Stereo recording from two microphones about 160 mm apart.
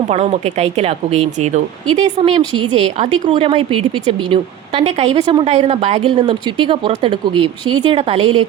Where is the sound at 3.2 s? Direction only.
35° right (ahead or behind).